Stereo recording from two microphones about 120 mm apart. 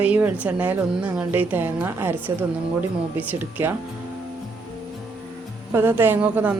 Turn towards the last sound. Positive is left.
turn(degrees=-15)  # may be behind; listen again after turning